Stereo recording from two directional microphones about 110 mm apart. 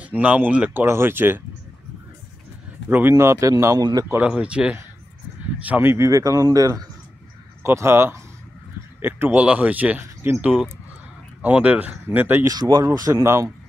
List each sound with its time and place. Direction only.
0.0 s speech: 15° right (ahead or behind)
2.9 s speech: 20° right (ahead or behind)
4.2 s speech: 10° right (ahead or behind)
12.4 s speech: 35° right (ahead or behind)